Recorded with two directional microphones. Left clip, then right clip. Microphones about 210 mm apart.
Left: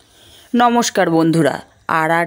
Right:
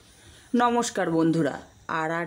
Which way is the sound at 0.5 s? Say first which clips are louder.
Left 9 dB; 30° left (ahead or behind).